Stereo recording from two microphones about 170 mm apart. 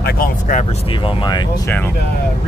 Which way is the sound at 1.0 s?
25° left (ahead or behind).